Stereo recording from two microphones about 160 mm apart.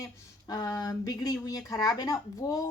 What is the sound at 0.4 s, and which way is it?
Speech, 25° left (ahead or behind).